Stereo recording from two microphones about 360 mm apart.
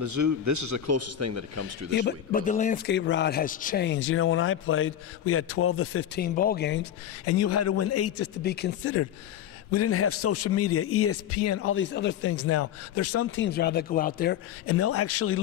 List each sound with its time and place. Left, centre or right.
0.0 s a man's voice: right
2.0 s a man's voice: left
7.2 s a man's voice: left
8.5 s a man's voice: left
13.5 s a man's voice: left